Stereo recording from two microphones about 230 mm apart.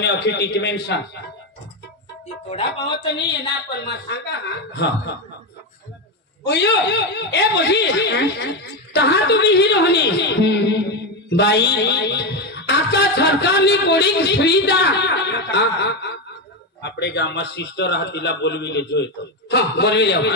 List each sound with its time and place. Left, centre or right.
0.0 s a woman's voice: left
3.7 s a woman's voice: left
6.4 s a woman's voice: left